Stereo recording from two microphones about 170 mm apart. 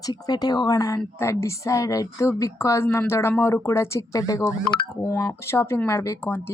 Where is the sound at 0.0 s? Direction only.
20° left (ahead or behind).